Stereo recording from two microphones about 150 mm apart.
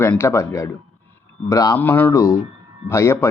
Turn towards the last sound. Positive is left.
turn(degrees=20)  # may be behind; listen again after turning